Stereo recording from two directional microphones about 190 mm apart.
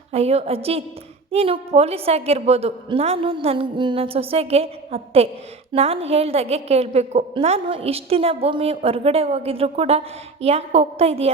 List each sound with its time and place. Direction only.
0.1 s a woman's voice: 30° right (ahead or behind)